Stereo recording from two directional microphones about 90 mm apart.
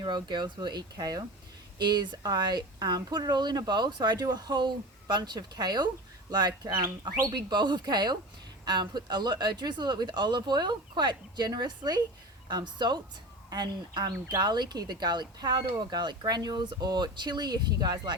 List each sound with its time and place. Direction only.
0.0 s speech: 55° right (ahead or behind)
1.8 s speech: 55° right (ahead or behind)